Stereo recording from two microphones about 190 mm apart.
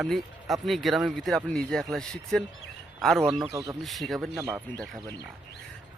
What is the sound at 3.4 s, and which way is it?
Speech, 15° right (ahead or behind).